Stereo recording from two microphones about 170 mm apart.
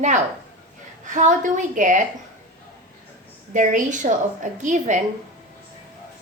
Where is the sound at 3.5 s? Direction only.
50° right (ahead or behind).